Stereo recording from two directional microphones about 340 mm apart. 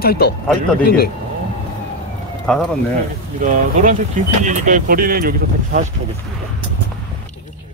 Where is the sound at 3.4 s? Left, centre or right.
Right.